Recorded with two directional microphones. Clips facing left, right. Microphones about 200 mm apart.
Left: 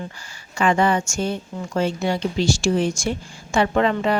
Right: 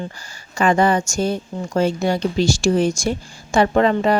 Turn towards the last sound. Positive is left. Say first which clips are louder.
# right 3 dB
turn(degrees=-40)  # may be behind; listen again after turning